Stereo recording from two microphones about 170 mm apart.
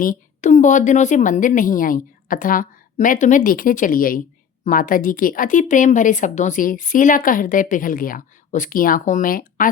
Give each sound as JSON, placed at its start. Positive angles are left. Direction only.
{"t": 0.0, "sound": "a woman's voice", "side_deg": 50}